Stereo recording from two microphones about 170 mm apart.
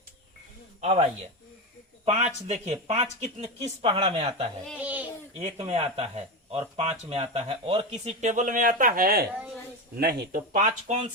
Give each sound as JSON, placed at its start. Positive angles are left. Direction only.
{"t": 0.8, "sound": "speech", "side_deg": -40}
{"t": 2.0, "sound": "speech", "side_deg": -40}
{"t": 4.8, "sound": "goat", "side_deg": -10}
{"t": 5.4, "sound": "speech", "side_deg": -40}